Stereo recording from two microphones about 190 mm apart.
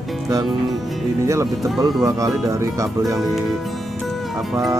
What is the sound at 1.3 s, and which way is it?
Speech, 15° right (ahead or behind).